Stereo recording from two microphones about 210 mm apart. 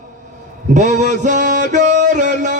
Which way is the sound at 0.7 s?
35° right (ahead or behind).